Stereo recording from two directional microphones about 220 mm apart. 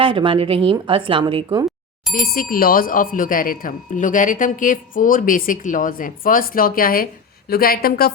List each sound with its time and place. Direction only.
0.0 s a woman's voice: 25° right (ahead or behind)
2.2 s speech: 40° left (ahead or behind)